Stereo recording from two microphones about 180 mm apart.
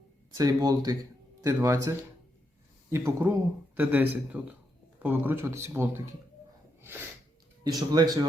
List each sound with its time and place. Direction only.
0.3 s speech: 20° right (ahead or behind)
7.6 s speech: 20° right (ahead or behind)